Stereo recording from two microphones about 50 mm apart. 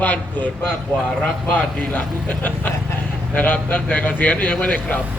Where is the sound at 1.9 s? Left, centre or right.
Left.